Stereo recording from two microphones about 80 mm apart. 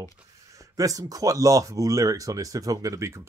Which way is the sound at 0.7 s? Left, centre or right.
Right.